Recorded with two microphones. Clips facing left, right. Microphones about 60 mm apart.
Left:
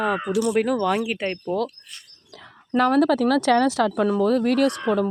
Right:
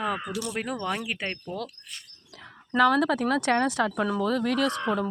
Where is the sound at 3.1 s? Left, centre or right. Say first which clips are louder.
Left 6 dB; left.